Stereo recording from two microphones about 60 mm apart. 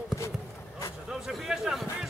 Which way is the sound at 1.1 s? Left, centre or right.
Centre.